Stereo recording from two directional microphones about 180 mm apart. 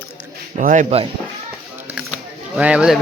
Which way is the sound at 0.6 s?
45° right (ahead or behind).